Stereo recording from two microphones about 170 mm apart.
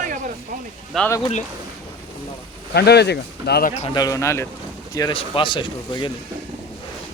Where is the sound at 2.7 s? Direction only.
75° left (ahead or behind).